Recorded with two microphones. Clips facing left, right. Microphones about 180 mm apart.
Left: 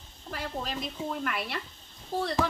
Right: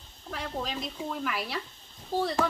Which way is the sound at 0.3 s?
Centre (ahead or behind).